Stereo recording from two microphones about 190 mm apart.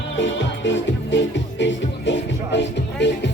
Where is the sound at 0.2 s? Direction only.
75° left (ahead or behind).